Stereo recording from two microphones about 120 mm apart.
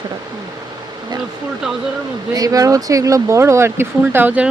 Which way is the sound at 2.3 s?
30° right (ahead or behind).